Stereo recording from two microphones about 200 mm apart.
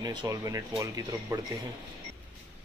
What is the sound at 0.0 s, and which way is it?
Speech, 20° right (ahead or behind).